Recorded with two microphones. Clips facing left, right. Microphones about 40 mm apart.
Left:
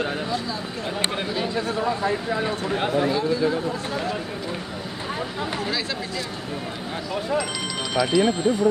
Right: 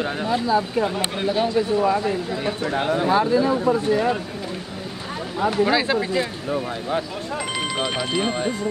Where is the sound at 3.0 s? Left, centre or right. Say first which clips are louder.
Right 5 dB; right.